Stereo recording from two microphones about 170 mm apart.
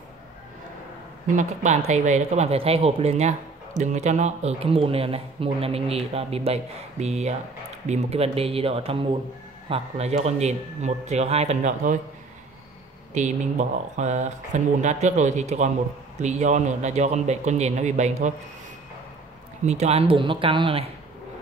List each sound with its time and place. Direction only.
1.2 s speech: 50° right (ahead or behind)
13.1 s speech: 45° right (ahead or behind)
19.6 s speech: 40° right (ahead or behind)